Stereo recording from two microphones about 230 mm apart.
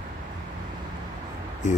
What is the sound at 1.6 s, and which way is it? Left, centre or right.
Speech, left.